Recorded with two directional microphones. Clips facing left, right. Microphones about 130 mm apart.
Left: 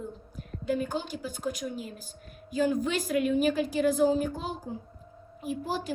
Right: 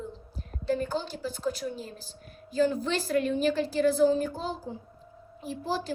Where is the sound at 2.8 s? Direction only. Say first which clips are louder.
Even; 10° left (ahead or behind).